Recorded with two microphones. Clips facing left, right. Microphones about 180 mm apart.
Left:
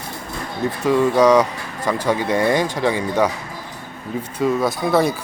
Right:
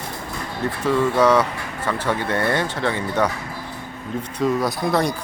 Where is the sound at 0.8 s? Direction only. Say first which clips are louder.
Left 3 dB; 15° left (ahead or behind).